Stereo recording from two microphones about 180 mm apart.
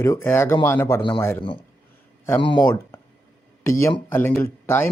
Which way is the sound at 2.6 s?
15° left (ahead or behind).